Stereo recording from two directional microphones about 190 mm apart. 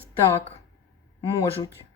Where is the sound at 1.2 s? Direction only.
25° left (ahead or behind).